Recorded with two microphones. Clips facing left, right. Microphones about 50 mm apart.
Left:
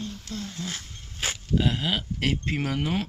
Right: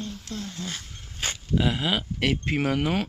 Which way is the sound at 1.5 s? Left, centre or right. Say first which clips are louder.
Right 1 dB; centre.